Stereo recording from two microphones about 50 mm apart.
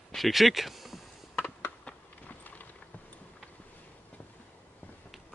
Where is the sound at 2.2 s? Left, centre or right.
Left.